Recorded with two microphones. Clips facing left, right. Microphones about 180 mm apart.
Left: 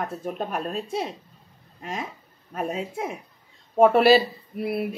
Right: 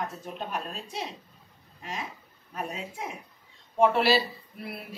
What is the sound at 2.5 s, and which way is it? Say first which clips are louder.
Speech: left 7 dB; 50° left (ahead or behind).